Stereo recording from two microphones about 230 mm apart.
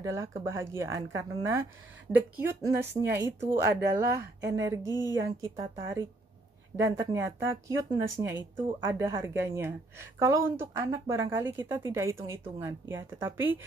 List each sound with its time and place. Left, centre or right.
0.0 s a woman's voice: centre
4.8 s speech: centre
5.2 s a woman's voice: centre